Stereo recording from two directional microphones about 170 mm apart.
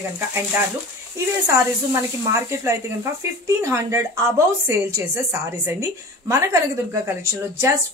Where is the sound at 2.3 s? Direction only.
15° right (ahead or behind).